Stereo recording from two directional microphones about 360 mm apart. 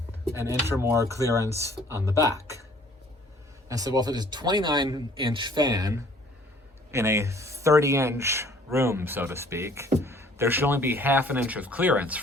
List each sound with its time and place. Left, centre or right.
0.3 s speech: centre
3.7 s speech: centre